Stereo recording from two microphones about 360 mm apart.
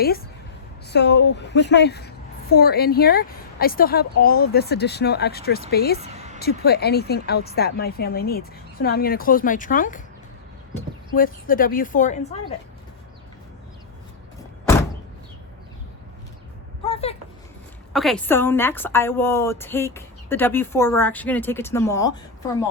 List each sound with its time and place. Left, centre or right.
0.9 s speech: left
6.0 s a sound: centre
6.4 s speech: left
11.1 s speech: left
16.8 s a sound: centre
17.9 s a woman's voice: centre